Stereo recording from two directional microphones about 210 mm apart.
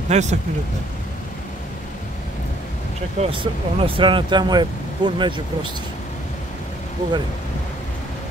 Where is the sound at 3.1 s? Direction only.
25° right (ahead or behind).